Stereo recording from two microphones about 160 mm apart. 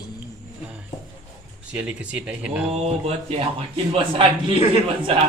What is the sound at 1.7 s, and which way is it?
Speech, 5° right (ahead or behind).